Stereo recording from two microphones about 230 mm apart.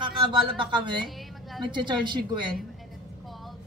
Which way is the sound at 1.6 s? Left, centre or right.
Right.